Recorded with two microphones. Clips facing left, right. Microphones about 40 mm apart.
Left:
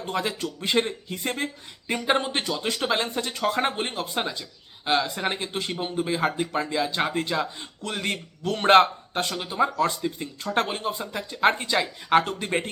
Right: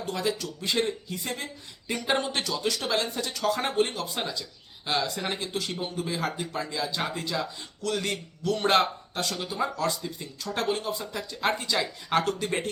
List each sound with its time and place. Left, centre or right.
0.0 s a man's voice: left
1.9 s speech: left